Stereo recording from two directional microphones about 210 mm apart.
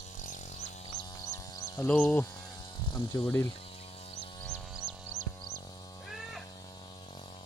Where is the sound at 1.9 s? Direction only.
10° left (ahead or behind).